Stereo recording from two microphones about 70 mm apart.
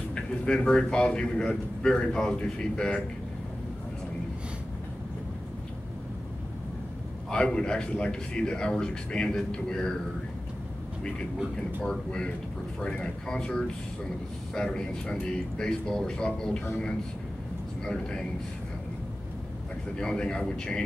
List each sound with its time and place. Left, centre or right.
0.1 s a man's voice: centre
7.2 s a man's voice: centre
11.5 s a man's voice: centre
17.8 s a man's voice: centre
20.0 s a man's voice: centre